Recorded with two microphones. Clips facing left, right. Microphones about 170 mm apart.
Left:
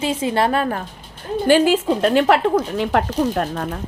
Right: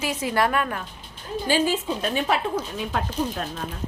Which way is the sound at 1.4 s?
65° left (ahead or behind).